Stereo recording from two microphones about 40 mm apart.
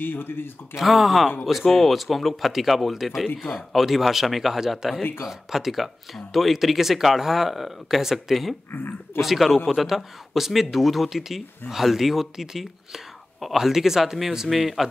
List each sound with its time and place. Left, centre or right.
0.0 s speech: left
0.7 s speech: centre
8.7 s speech: left
9.2 s speech: centre